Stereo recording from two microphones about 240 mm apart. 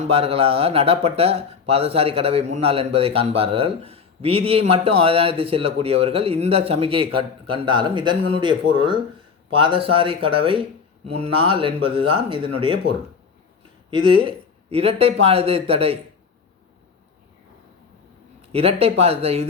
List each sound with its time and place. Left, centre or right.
0.0 s speech: right
13.9 s speech: right
18.4 s speech: right